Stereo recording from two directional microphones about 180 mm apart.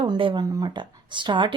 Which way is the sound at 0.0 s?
25° right (ahead or behind).